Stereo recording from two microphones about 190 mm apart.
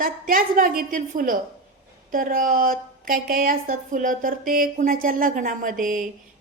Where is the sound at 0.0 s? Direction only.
45° right (ahead or behind).